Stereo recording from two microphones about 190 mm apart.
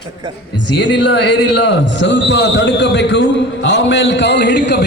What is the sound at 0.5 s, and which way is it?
A man's voice, 65° left (ahead or behind).